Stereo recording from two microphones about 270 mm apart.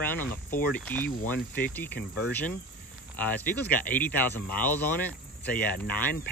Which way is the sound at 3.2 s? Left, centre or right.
Centre.